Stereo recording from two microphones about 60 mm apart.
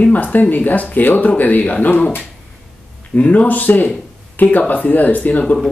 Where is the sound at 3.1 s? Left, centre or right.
Left.